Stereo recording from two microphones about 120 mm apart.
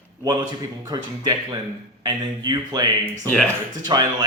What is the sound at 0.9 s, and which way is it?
A man's voice, 30° right (ahead or behind).